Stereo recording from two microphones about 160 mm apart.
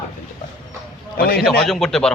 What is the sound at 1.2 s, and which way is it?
Speech, 75° left (ahead or behind).